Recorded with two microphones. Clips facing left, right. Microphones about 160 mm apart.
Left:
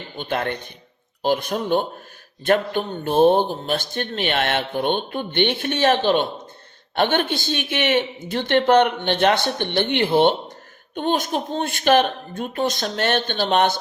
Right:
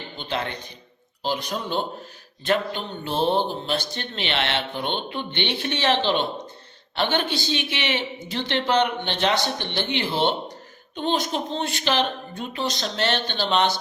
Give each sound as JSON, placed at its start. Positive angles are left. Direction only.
{"t": 0.2, "sound": "speech", "side_deg": 55}